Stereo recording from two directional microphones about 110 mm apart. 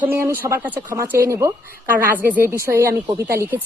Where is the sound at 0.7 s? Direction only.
30° right (ahead or behind).